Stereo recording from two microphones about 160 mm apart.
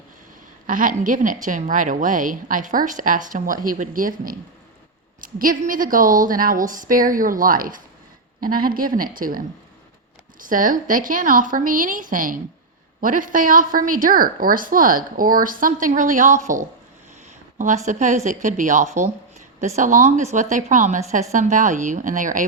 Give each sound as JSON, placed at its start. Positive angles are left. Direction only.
{"t": 0.7, "sound": "a woman's voice", "side_deg": -55}
{"t": 10.4, "sound": "a woman's voice", "side_deg": -55}
{"t": 17.6, "sound": "a woman's voice", "side_deg": -50}